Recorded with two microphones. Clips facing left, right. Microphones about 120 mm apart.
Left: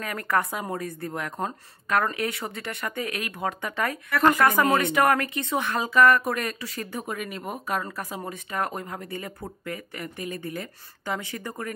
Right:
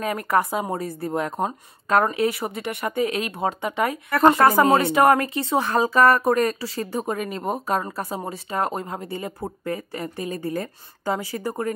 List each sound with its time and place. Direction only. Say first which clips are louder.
0.0 s speech: right 4 dB; 20° right (ahead or behind)